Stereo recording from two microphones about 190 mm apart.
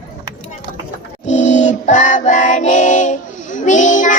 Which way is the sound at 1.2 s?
40° left (ahead or behind).